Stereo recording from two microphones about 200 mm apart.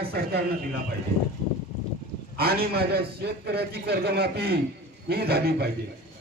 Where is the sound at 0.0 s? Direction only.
50° right (ahead or behind).